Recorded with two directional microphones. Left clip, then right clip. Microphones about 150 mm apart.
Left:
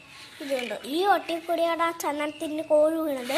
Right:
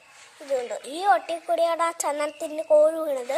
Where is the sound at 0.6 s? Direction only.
55° right (ahead or behind); by 2.6 s 70° right (ahead or behind).